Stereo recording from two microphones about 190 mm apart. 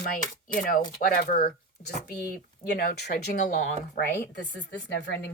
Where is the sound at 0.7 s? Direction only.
45° left (ahead or behind).